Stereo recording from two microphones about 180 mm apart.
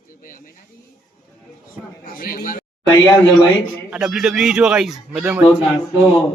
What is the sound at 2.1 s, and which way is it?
Speech, 50° left (ahead or behind).